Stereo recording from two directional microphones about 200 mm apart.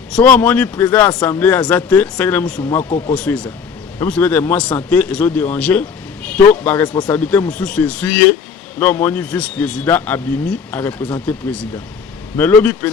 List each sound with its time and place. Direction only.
0.1 s a man's voice: 5° left (ahead or behind)
2.6 s speech: 20° left (ahead or behind)
3.1 s a man's voice: 5° left (ahead or behind)